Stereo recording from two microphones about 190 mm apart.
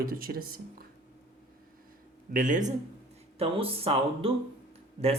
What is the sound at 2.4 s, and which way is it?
Speech, 40° right (ahead or behind).